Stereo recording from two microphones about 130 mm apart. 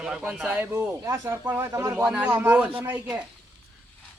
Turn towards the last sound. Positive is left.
turn(degrees=-15)  # may be behind; listen again after turning